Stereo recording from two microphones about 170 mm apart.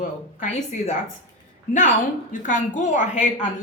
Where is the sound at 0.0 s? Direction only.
45° left (ahead or behind).